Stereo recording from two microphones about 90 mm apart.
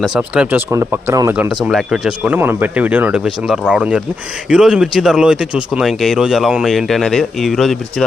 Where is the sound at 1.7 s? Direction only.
Centre (ahead or behind).